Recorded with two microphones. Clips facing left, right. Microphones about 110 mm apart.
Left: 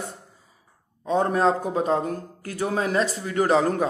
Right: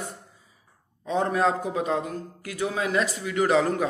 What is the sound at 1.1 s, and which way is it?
A man's voice, 35° left (ahead or behind).